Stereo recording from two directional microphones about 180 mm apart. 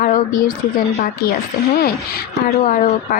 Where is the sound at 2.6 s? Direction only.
50° left (ahead or behind).